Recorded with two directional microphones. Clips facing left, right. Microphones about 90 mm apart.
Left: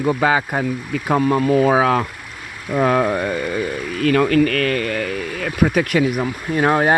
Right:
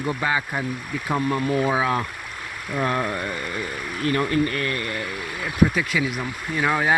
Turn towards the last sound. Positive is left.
turn(degrees=45)  # may be behind; listen again after turning